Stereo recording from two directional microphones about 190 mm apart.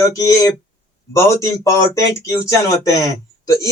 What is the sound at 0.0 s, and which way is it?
A man's voice, 15° left (ahead or behind).